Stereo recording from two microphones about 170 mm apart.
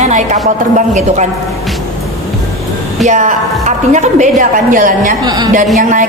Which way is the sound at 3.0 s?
45° right (ahead or behind).